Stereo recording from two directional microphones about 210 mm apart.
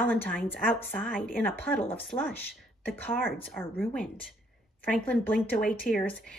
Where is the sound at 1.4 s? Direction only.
10° left (ahead or behind).